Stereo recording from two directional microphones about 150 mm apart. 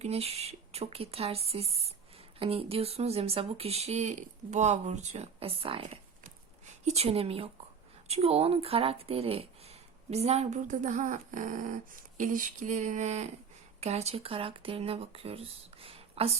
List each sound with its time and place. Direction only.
0.0 s speech: 45° right (ahead or behind)